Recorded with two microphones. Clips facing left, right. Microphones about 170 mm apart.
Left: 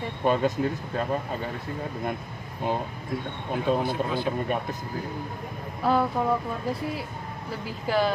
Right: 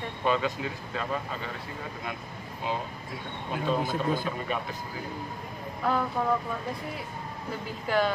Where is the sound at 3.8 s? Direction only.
45° right (ahead or behind).